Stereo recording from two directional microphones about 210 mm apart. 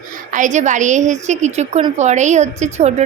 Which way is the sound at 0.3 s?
35° right (ahead or behind).